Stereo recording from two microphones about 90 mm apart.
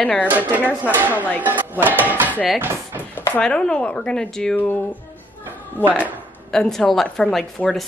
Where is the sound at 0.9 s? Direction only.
20° right (ahead or behind).